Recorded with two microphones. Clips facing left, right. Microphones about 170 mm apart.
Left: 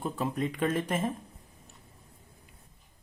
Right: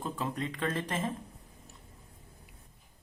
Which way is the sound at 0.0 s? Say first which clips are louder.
Left 4 dB; 10° left (ahead or behind).